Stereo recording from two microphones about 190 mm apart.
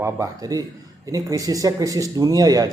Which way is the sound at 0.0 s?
15° right (ahead or behind).